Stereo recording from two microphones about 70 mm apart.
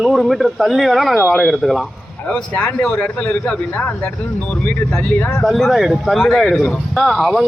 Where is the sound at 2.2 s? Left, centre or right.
Centre.